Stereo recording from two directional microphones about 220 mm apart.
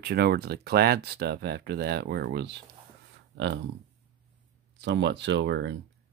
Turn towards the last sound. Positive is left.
turn(degrees=-55)  # may be behind; listen again after turning